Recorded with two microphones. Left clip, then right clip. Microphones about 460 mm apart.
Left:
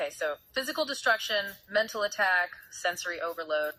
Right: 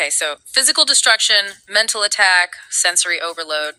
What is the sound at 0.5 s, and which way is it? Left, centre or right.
Speech, left.